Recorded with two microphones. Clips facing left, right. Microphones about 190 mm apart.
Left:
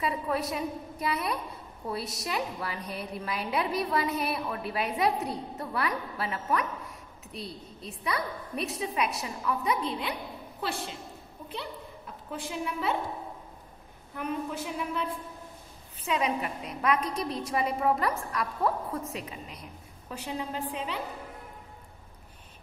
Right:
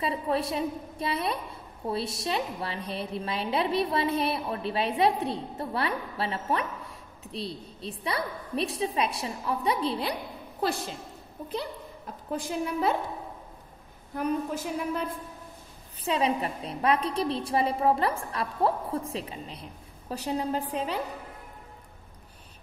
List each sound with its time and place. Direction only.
0.0 s a woman's voice: 30° right (ahead or behind)
12.3 s a woman's voice: 40° right (ahead or behind)
14.1 s a woman's voice: 40° right (ahead or behind)
16.0 s a woman's voice: 30° right (ahead or behind)